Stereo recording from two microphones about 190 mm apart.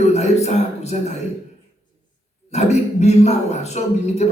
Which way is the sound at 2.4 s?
35° left (ahead or behind).